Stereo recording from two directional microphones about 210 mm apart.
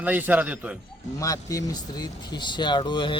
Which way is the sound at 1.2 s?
15° left (ahead or behind).